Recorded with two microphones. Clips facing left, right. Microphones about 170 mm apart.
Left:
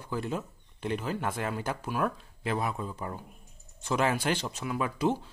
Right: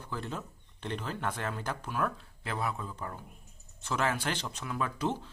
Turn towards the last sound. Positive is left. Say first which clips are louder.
# left 4 dB
turn(degrees=10)  # may be behind; listen again after turning